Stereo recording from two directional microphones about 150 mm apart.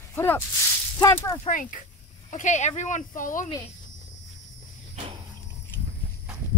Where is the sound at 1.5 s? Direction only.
60° left (ahead or behind).